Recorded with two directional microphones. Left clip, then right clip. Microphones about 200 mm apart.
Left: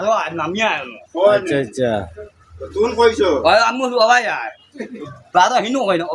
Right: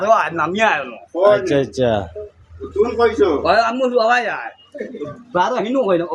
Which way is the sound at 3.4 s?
15° left (ahead or behind).